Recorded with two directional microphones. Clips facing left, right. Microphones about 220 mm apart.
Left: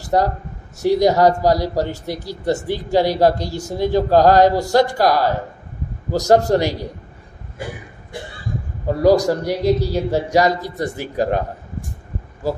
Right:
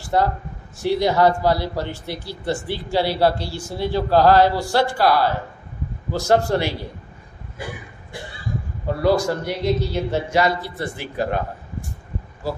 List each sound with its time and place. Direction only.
0.0 s a sound: 40° left (ahead or behind)
0.7 s a man's voice: 40° left (ahead or behind)
8.8 s a man's voice: 40° left (ahead or behind)